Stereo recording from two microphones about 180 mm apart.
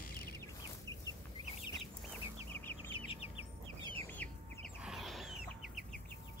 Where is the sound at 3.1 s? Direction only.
30° left (ahead or behind).